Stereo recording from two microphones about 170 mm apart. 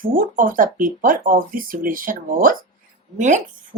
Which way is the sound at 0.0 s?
55° right (ahead or behind).